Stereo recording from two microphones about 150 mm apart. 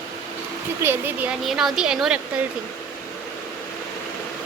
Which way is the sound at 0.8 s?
15° right (ahead or behind).